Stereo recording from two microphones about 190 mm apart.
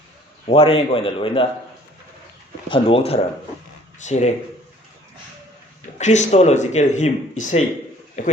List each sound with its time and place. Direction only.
0.4 s a man's voice: 30° left (ahead or behind)
2.6 s a man's voice: 30° left (ahead or behind)
6.0 s speech: 40° left (ahead or behind)